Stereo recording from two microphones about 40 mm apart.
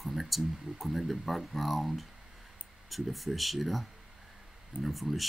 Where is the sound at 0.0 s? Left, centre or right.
Centre.